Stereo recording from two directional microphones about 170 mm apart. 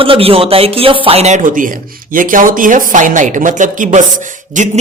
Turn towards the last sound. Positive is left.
turn(degrees=-45)  # may be behind; listen again after turning